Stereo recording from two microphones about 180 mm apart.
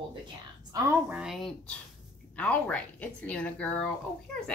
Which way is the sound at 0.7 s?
15° right (ahead or behind).